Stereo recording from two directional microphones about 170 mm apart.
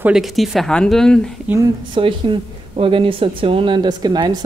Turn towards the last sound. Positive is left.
turn(degrees=-25)  # may be behind; listen again after turning